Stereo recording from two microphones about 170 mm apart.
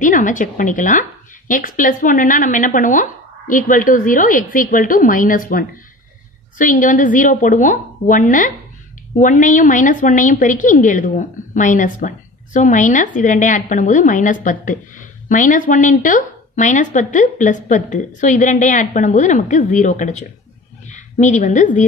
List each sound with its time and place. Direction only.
0.0 s a woman's voice: 50° left (ahead or behind)
21.2 s a woman's voice: 45° left (ahead or behind)